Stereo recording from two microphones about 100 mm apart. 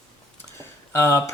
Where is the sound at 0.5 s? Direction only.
25° left (ahead or behind).